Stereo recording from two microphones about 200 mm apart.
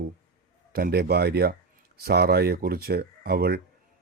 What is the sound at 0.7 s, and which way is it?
Speech, 50° right (ahead or behind).